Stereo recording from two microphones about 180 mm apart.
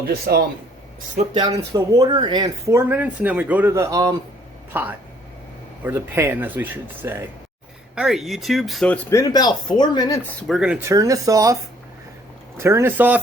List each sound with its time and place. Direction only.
0.1 s speech: 60° right (ahead or behind)
1.3 s speech: 25° right (ahead or behind)
7.9 s speech: centre (ahead or behind)
9.0 s speech: 20° left (ahead or behind)
10.4 s speech: centre (ahead or behind); by 11.5 s 20° right (ahead or behind)
12.5 s speech: 15° right (ahead or behind)